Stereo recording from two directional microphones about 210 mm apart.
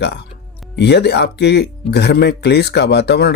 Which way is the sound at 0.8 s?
55° left (ahead or behind).